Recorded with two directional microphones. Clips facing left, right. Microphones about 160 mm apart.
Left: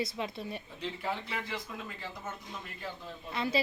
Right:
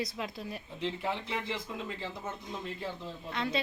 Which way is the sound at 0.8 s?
20° right (ahead or behind).